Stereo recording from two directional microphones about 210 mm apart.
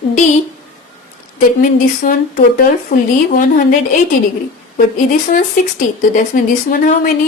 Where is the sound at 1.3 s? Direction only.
40° left (ahead or behind).